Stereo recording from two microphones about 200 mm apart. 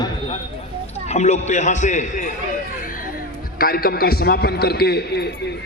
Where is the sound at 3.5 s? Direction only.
45° left (ahead or behind).